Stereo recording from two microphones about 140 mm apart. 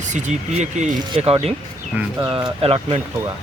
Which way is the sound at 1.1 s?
40° right (ahead or behind).